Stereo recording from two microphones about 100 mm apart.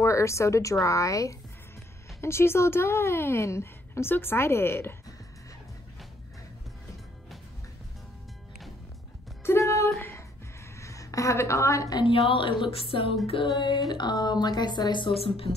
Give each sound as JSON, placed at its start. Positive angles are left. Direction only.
{"t": 0.0, "sound": "a woman's voice", "side_deg": 30}
{"t": 9.4, "sound": "a sound", "side_deg": 30}
{"t": 10.8, "sound": "a woman's voice", "side_deg": 30}
{"t": 12.0, "sound": "a woman's voice", "side_deg": 60}
{"t": 13.6, "sound": "a woman's voice", "side_deg": 50}